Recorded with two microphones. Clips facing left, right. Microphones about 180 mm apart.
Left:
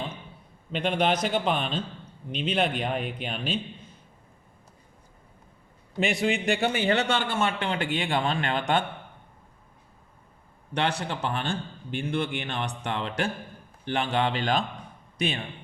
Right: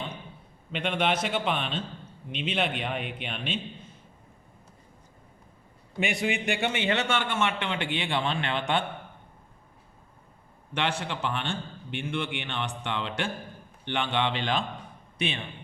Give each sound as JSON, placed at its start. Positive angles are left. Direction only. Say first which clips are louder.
{"t": 0.7, "sound": "a man's voice", "louder": "left 3 dB", "side_deg": 35}
{"t": 6.0, "sound": "a man's voice", "louder": "left 3 dB", "side_deg": 35}
{"t": 10.8, "sound": "a man's voice", "louder": "left 2 dB", "side_deg": 40}